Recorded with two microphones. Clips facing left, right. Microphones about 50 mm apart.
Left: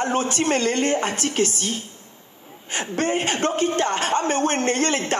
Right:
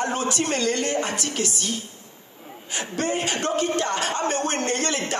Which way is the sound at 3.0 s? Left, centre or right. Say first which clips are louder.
Left 3 dB; left.